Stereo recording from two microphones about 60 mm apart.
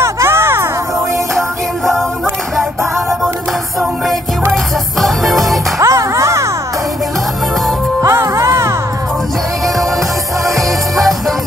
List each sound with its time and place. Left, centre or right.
0.0 s a sound: right
5.0 s music: centre
5.8 s music: right
8.0 s music: right
10.4 s music: centre